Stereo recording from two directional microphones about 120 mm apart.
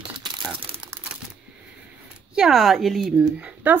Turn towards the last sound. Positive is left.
turn(degrees=0)  # may be behind; listen again after turning